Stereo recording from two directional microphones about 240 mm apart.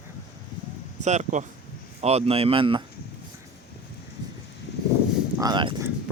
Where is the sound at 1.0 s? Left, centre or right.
Right.